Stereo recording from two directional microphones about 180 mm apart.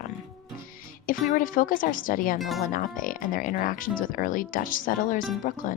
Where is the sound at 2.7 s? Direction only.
50° left (ahead or behind).